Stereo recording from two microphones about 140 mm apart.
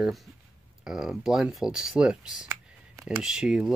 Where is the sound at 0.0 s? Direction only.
Centre (ahead or behind).